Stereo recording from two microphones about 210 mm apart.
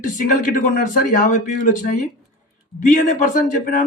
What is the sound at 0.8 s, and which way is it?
Speech, 40° left (ahead or behind).